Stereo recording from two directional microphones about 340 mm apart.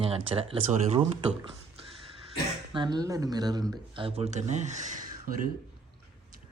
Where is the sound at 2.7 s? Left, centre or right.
Centre.